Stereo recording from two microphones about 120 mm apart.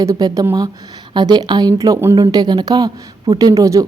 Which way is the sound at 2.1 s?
35° right (ahead or behind).